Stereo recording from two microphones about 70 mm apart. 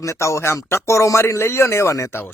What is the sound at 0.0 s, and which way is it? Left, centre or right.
Speech, left.